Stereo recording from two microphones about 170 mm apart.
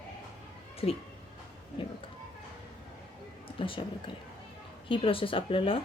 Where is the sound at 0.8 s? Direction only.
35° left (ahead or behind).